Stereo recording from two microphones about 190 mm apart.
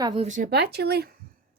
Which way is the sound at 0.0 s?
25° right (ahead or behind).